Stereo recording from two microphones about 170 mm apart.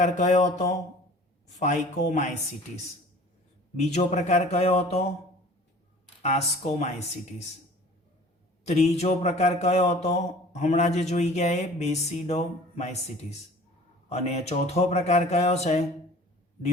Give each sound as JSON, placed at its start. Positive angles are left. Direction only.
{"t": 0.0, "sound": "speech", "side_deg": 45}
{"t": 3.8, "sound": "speech", "side_deg": 40}
{"t": 6.2, "sound": "speech", "side_deg": 40}
{"t": 8.6, "sound": "speech", "side_deg": 40}
{"t": 14.1, "sound": "speech", "side_deg": 40}